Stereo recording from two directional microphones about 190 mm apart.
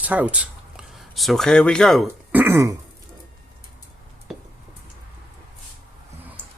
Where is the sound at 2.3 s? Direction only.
10° right (ahead or behind).